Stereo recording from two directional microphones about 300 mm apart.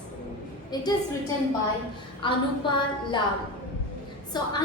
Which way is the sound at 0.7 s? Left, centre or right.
Centre.